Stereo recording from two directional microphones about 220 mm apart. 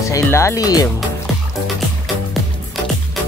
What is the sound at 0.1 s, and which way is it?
Speech, 10° left (ahead or behind).